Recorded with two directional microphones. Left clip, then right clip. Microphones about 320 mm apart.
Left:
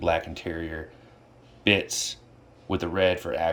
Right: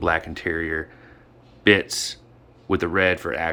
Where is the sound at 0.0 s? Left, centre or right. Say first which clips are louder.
Right 3 dB; centre.